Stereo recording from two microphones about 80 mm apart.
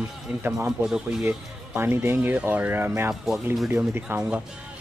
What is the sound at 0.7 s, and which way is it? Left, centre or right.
Speech, centre.